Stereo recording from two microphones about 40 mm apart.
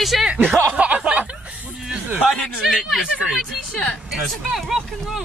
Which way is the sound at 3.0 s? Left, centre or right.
Centre.